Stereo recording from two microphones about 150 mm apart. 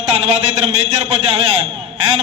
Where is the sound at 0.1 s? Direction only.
40° right (ahead or behind).